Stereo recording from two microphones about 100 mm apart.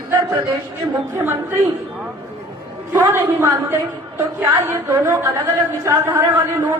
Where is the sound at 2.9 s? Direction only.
25° right (ahead or behind).